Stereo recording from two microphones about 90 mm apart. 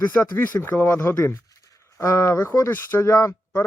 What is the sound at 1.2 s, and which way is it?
Speech, 35° left (ahead or behind).